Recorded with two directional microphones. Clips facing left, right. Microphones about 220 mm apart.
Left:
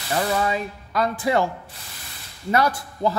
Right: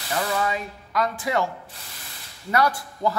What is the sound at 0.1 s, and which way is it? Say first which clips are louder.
Speech: left 3 dB; 30° left (ahead or behind).